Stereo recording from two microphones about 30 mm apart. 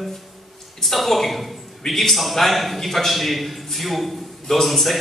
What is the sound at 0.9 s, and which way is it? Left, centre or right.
A man's voice, centre.